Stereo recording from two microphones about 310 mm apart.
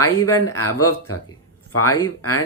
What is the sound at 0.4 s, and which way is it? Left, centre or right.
Speech, left.